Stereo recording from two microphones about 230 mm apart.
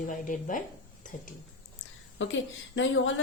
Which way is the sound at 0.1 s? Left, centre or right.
Left.